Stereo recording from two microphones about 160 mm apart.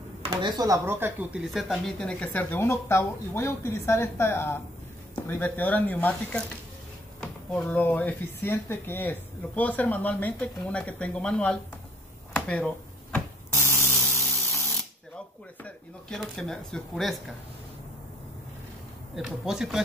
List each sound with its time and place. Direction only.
0.2 s speech: 25° right (ahead or behind)
1.4 s speech: centre (ahead or behind)
12.4 s a sound: 5° left (ahead or behind)
15.1 s speech: 5° left (ahead or behind)
19.1 s speech: centre (ahead or behind)